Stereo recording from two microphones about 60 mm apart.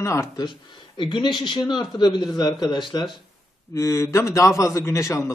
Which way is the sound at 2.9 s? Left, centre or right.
Left.